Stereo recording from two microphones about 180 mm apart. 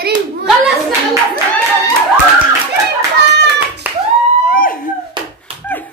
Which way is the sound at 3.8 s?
10° right (ahead or behind).